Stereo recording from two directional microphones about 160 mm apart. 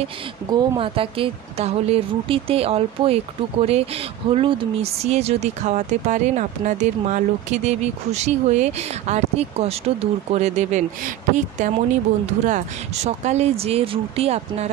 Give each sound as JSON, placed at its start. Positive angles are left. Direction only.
{"t": 0.5, "sound": "speech", "side_deg": -30}